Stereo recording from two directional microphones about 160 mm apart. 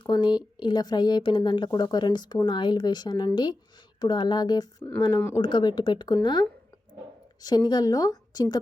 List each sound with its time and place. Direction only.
0.0 s speech: 30° left (ahead or behind)
7.4 s speech: 25° left (ahead or behind)